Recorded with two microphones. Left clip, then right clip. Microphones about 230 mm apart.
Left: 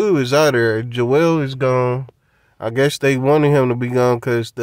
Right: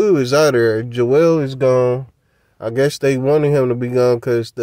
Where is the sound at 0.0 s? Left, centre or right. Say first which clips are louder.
Right 1 dB; centre.